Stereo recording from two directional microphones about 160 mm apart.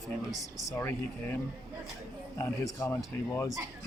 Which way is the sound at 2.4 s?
20° left (ahead or behind).